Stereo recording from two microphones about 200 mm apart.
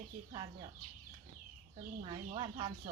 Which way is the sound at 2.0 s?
25° right (ahead or behind).